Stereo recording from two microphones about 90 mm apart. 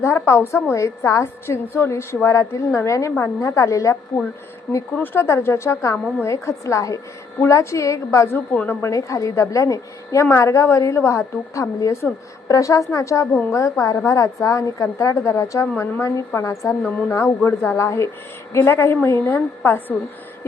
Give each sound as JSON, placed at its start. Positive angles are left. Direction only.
{"t": 0.0, "sound": "a woman's voice", "side_deg": 30}
{"t": 5.1, "sound": "a woman's voice", "side_deg": 30}
{"t": 8.5, "sound": "a woman's voice", "side_deg": 20}
{"t": 8.9, "sound": "a woman's voice", "side_deg": 35}